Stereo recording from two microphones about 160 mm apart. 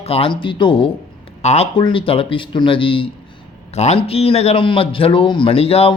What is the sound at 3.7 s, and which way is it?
A man's voice, 45° left (ahead or behind).